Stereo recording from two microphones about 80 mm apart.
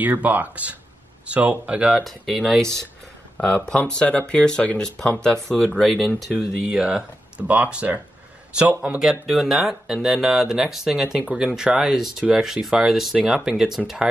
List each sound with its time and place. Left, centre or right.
0.0 s speech: right
2.0 s speech: centre
6.3 s speech: centre
9.2 s speech: centre